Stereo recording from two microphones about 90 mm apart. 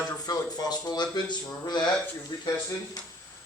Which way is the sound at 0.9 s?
50° left (ahead or behind).